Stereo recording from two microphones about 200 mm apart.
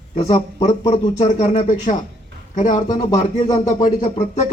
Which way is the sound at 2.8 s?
20° left (ahead or behind).